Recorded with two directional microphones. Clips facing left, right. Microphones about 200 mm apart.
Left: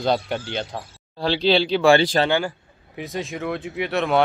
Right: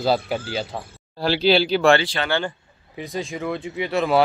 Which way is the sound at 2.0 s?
40° left (ahead or behind).